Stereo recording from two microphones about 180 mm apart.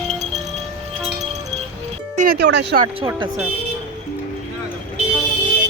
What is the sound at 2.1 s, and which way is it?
Speech, 55° right (ahead or behind).